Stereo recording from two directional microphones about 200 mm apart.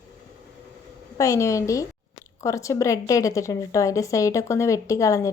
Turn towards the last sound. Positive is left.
turn(degrees=15)  # may be behind; listen again after turning